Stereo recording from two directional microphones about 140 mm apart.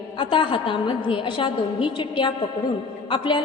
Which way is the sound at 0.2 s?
35° left (ahead or behind).